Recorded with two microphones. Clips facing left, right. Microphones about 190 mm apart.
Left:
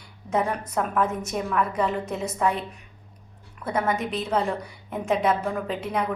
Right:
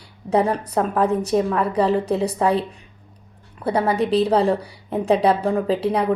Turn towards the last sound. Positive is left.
turn(degrees=-35)  # may be behind; listen again after turning